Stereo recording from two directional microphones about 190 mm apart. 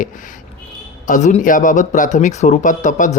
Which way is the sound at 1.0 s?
40° left (ahead or behind).